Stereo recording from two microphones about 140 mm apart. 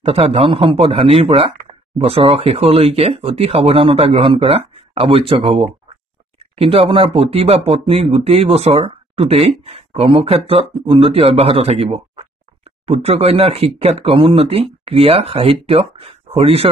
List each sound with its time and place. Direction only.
0.0 s speech: 45° right (ahead or behind)